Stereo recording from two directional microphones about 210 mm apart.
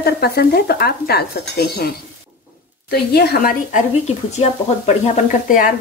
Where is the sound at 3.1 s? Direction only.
50° left (ahead or behind).